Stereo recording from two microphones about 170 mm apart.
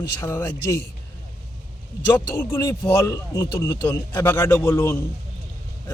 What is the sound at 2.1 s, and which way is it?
A man's voice, 15° left (ahead or behind).